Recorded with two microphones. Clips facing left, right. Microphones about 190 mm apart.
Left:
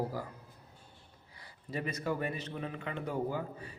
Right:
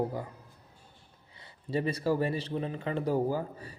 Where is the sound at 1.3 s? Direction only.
25° right (ahead or behind).